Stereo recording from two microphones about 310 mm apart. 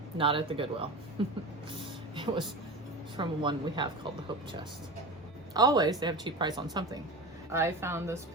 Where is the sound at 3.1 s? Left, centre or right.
Centre.